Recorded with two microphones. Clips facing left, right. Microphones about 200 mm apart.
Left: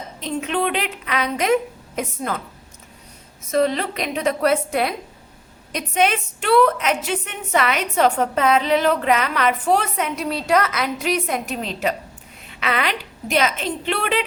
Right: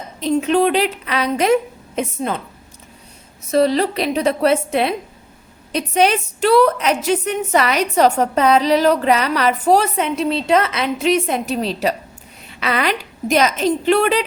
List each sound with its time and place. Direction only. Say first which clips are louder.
0.2 s a woman's voice: right 8 dB; 35° right (ahead or behind)
3.5 s a woman's voice: right 4 dB; 35° right (ahead or behind)